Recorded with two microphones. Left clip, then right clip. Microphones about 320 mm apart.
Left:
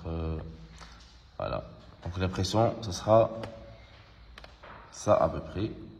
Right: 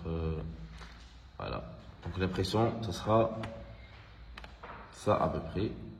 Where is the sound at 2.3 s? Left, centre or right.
Left.